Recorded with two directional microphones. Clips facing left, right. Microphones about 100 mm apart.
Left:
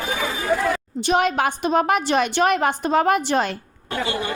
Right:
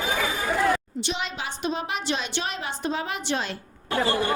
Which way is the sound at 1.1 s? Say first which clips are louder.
Left 13 dB; 55° left (ahead or behind).